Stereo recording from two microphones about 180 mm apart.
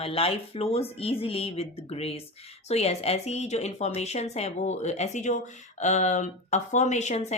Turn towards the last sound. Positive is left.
turn(degrees=40)  # may be behind; listen again after turning